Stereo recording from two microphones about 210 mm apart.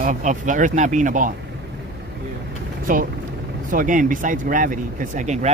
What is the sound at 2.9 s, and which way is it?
Speech, 40° right (ahead or behind).